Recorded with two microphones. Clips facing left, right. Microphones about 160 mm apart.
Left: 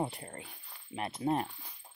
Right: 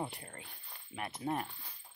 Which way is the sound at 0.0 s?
25° left (ahead or behind).